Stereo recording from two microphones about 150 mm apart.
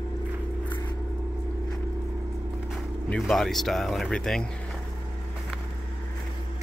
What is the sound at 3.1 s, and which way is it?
Speech, 5° left (ahead or behind).